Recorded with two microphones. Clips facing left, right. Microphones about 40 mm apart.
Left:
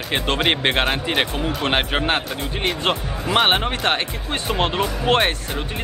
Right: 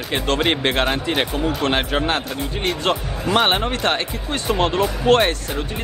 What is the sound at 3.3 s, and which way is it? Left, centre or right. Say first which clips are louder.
Speech: even; centre.